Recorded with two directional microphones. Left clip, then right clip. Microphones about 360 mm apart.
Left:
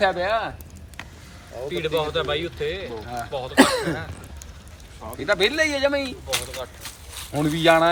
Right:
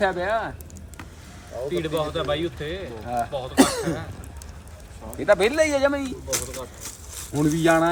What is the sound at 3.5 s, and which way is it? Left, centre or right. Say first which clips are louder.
Speech: left 3 dB; centre.